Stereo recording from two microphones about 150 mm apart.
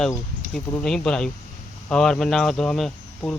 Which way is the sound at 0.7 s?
5° left (ahead or behind).